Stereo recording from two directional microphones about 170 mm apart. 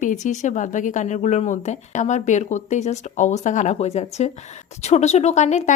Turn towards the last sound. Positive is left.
turn(degrees=40)  # may be behind; listen again after turning